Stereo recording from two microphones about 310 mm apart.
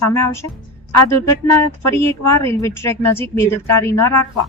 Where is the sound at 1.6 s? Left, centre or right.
Centre.